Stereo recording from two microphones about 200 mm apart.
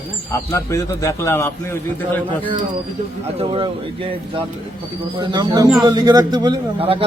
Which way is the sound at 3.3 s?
25° right (ahead or behind).